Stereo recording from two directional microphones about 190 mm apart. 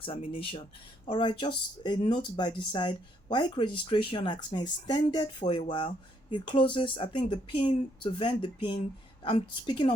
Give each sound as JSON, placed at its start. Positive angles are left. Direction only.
{"t": 0.0, "sound": "speech", "side_deg": 30}